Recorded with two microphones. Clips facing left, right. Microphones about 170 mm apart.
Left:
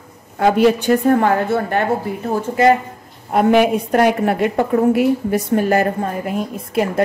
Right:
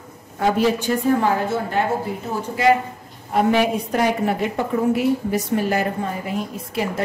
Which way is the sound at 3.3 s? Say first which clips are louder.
Left 5 dB; 55° left (ahead or behind).